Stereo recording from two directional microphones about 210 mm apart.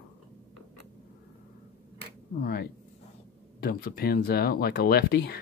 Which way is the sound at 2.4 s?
45° left (ahead or behind).